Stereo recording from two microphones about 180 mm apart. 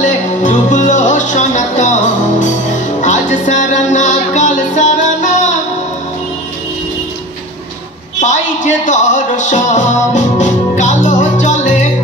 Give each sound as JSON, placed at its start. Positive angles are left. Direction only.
{"t": 0.0, "sound": "music", "side_deg": 45}
{"t": 8.2, "sound": "music", "side_deg": 40}